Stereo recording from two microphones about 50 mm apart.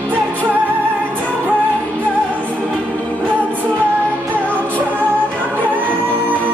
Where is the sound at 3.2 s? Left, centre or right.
Right.